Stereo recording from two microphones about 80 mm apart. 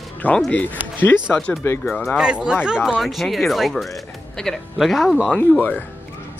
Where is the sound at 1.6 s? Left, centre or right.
Left.